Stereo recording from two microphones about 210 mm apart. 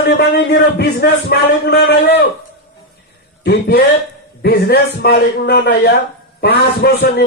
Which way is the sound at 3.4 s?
45° left (ahead or behind).